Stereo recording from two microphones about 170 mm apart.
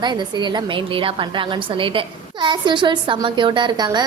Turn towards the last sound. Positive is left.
turn(degrees=-25)  # may be behind; listen again after turning